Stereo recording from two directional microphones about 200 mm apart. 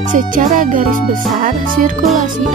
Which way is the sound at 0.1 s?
40° right (ahead or behind).